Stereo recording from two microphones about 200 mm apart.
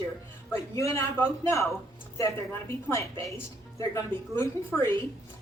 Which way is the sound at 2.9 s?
15° left (ahead or behind).